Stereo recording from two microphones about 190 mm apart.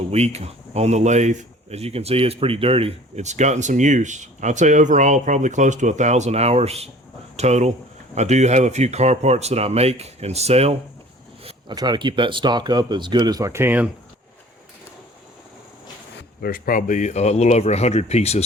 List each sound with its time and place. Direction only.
0.1 s speech: 35° right (ahead or behind)
11.4 s speech: 20° right (ahead or behind)
16.4 s speech: 50° left (ahead or behind); by 18.4 s 35° left (ahead or behind)